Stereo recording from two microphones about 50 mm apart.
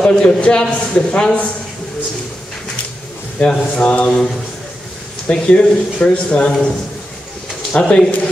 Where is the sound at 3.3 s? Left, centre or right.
Centre.